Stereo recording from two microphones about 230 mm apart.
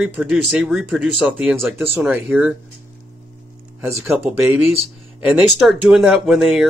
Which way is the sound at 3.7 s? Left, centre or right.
Centre.